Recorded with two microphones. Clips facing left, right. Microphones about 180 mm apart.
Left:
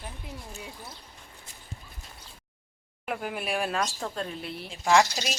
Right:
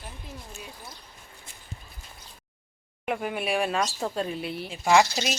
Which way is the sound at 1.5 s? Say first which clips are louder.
Even; 40° left (ahead or behind).